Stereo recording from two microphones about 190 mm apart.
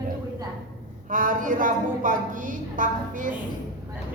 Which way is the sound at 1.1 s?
45° right (ahead or behind).